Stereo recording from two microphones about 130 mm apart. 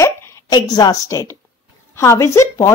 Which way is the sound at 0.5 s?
30° left (ahead or behind).